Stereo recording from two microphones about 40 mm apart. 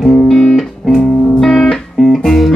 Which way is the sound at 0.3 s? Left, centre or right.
Centre.